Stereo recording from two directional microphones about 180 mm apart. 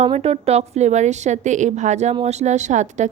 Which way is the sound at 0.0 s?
35° right (ahead or behind).